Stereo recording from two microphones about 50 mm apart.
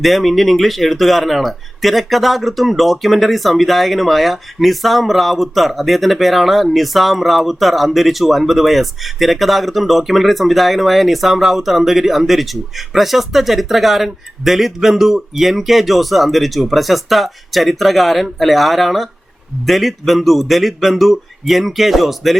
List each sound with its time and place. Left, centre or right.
0.0 s speech: centre